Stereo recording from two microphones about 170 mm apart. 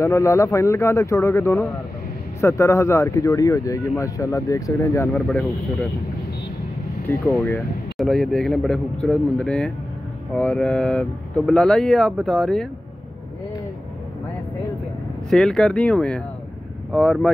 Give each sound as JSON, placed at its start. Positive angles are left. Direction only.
{"t": 0.0, "sound": "speech", "side_deg": 15}
{"t": 7.1, "sound": "speech", "side_deg": 10}
{"t": 15.2, "sound": "speech", "side_deg": 5}